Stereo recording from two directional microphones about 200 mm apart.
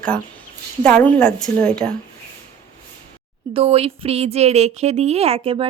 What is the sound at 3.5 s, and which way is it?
Speech, 30° right (ahead or behind).